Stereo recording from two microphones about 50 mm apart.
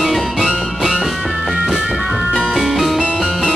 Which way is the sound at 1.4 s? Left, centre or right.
Centre.